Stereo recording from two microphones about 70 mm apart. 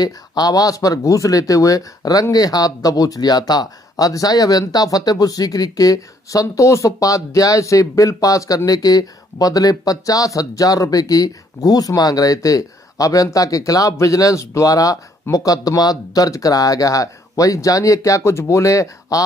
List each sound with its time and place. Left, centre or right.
0.0 s speech: left